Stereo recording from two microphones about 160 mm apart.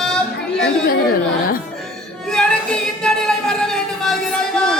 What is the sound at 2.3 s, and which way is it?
Music, 5° left (ahead or behind).